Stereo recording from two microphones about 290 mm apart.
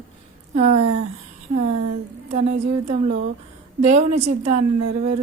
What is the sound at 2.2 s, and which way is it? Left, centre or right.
Speech, right.